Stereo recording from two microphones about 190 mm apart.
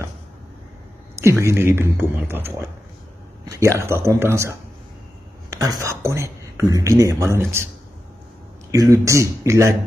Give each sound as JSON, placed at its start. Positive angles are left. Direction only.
{"t": 1.2, "sound": "speech", "side_deg": -15}
{"t": 8.7, "sound": "speech", "side_deg": -15}